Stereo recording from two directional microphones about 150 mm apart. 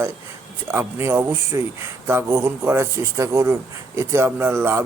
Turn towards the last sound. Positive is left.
turn(degrees=-15)  # may be behind; listen again after turning